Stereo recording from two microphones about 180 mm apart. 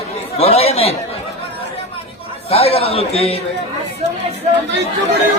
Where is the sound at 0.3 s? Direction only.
30° left (ahead or behind).